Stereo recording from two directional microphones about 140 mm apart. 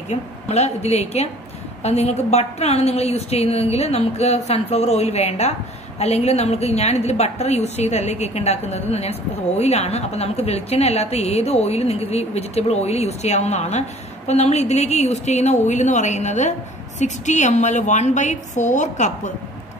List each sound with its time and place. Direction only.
0.1 s a woman's voice: 50° left (ahead or behind)